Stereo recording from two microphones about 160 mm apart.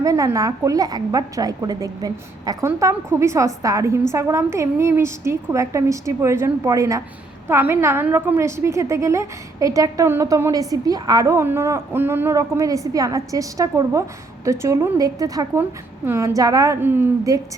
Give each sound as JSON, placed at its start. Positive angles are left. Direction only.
{"t": 0.0, "sound": "a woman's voice", "side_deg": -20}